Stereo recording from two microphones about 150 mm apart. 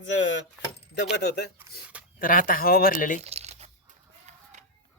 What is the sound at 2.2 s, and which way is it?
Speech, 70° left (ahead or behind).